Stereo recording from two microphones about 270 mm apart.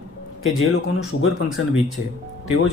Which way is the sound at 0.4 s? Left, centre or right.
Left.